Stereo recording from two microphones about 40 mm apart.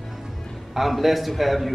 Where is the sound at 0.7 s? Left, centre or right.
Centre.